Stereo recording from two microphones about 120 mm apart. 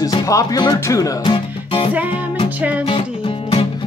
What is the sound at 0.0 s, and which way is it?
Speech, 30° left (ahead or behind).